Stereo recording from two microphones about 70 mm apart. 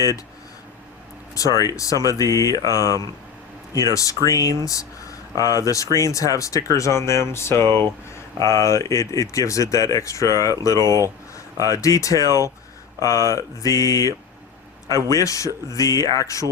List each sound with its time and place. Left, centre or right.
1.4 s speech: left
7.6 s speech: right
8.1 s speech: left
15.1 s speech: left